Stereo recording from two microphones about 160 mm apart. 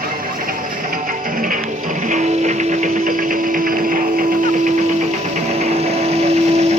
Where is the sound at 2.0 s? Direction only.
50° right (ahead or behind).